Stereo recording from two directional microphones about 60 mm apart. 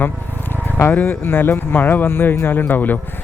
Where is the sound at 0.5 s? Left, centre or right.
Left.